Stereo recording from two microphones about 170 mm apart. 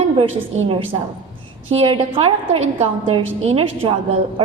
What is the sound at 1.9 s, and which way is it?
A woman's voice, 35° right (ahead or behind).